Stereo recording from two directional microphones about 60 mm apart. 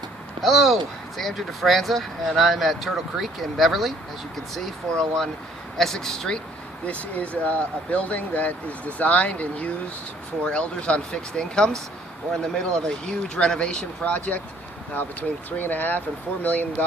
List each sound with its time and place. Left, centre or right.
0.4 s speech: centre
6.8 s speech: left
15.4 s speech: left